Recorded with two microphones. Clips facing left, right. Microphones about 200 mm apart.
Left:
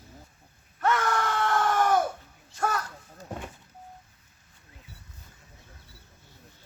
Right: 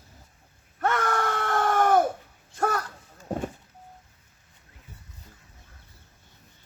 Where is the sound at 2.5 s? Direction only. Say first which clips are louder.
Right 3 dB; 45° right (ahead or behind).